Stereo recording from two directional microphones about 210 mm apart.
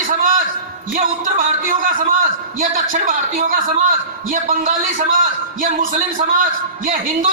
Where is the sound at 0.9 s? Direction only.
40° right (ahead or behind).